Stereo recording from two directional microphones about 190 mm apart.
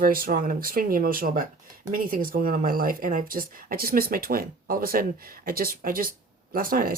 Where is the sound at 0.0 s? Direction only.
50° right (ahead or behind).